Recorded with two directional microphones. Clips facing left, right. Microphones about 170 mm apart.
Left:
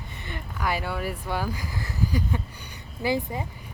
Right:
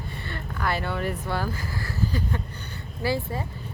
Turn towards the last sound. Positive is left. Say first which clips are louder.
# left 1 dB
turn(degrees=15)  # may be behind; listen again after turning